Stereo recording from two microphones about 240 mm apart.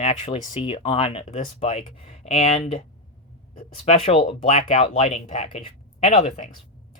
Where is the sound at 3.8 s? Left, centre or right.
Left.